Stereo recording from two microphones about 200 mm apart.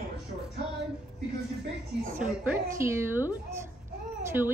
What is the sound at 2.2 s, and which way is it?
A woman's voice, 10° right (ahead or behind).